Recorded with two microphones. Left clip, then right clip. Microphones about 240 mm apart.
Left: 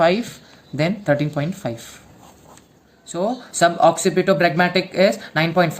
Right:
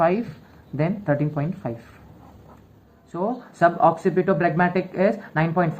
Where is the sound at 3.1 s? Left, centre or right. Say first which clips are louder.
Left 4 dB; left.